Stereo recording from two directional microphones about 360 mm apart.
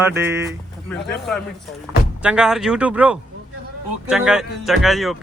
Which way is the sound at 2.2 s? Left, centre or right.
Centre.